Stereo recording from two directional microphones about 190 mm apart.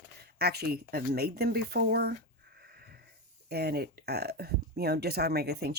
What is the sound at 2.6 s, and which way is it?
Wheeze, 55° right (ahead or behind).